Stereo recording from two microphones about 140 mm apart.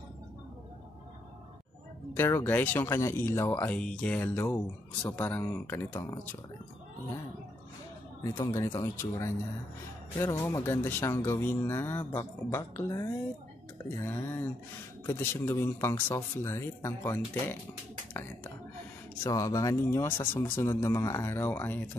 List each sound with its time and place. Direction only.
2.1 s speech: 15° left (ahead or behind)
8.2 s speech: 25° left (ahead or behind)
19.2 s speech: 25° left (ahead or behind)